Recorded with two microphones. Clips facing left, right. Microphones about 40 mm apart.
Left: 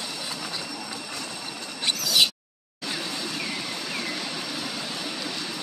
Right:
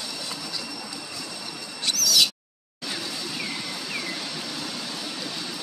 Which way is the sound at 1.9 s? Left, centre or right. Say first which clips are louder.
Even; left.